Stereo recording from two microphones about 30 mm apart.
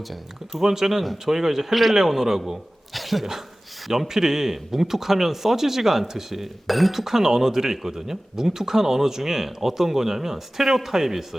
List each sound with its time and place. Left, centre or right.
0.6 s speech: centre
1.7 s speech: centre
2.0 s a man's voice: centre
4.1 s speech: centre
7.0 s speech: centre